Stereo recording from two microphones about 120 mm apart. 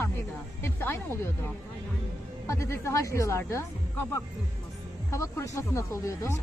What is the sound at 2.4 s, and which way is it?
Speech, 25° left (ahead or behind).